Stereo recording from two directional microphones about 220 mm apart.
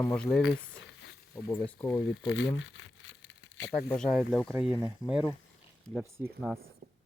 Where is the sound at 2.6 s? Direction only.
60° left (ahead or behind).